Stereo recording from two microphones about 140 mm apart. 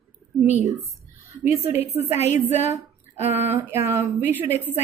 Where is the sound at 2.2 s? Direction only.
55° left (ahead or behind).